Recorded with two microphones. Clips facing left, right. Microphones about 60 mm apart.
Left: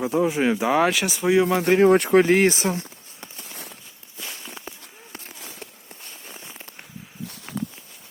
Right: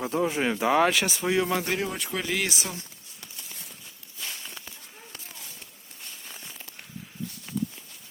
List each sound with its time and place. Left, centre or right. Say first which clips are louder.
0.0 s speech: left 5 dB; centre
1.9 s speech: left 15 dB; left
6.2 s a sound: left 3 dB; left
7.3 s walk: left 1 dB; left